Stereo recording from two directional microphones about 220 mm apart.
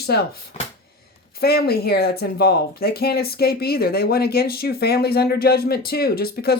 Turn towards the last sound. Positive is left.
turn(degrees=45)  # may be behind; listen again after turning